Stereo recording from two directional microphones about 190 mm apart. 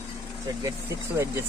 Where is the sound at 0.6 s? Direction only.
15° right (ahead or behind).